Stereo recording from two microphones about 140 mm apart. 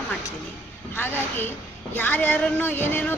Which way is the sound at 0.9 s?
15° left (ahead or behind).